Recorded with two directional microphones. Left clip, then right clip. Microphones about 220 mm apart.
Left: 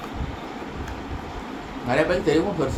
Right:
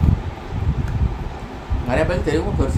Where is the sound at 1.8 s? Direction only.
10° right (ahead or behind).